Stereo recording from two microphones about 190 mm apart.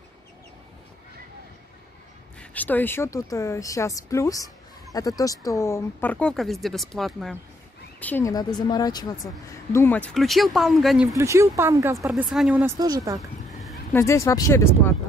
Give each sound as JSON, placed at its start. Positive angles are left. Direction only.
{"t": 2.5, "sound": "speech", "side_deg": 10}
{"t": 8.0, "sound": "a woman's voice", "side_deg": 10}
{"t": 11.1, "sound": "speech", "side_deg": -15}
{"t": 12.1, "sound": "speech", "side_deg": -5}
{"t": 12.7, "sound": "speech", "side_deg": -20}
{"t": 13.9, "sound": "speech", "side_deg": 15}